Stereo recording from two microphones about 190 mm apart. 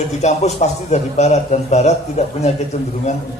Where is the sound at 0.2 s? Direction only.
35° left (ahead or behind).